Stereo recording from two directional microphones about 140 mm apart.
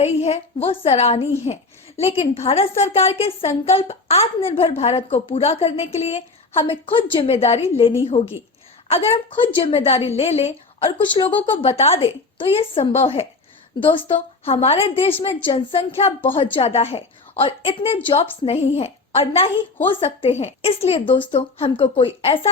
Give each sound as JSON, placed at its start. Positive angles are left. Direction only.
{"t": 0.0, "sound": "a woman's voice", "side_deg": 45}